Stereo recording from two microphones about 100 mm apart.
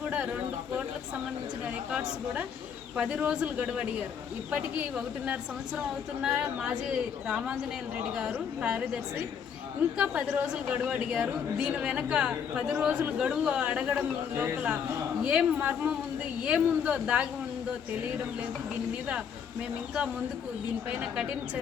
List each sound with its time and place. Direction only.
1.9 s a woman's voice: 10° right (ahead or behind)
10.0 s a woman's voice: 10° right (ahead or behind)